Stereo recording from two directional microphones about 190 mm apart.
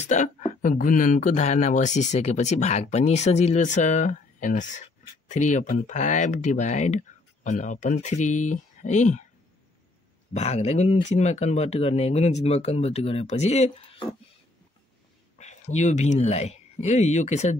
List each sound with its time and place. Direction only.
0.0 s speech: 40° left (ahead or behind)
10.3 s speech: 35° left (ahead or behind)
15.3 s speech: 40° left (ahead or behind)